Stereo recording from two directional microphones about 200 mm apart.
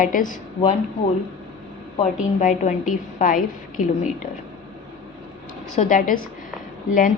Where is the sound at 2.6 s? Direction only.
40° left (ahead or behind).